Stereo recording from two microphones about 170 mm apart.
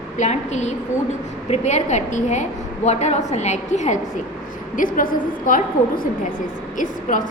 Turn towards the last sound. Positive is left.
turn(degrees=50)  # may be behind; listen again after turning